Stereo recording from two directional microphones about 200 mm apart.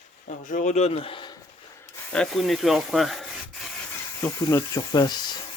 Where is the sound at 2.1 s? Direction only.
Centre (ahead or behind).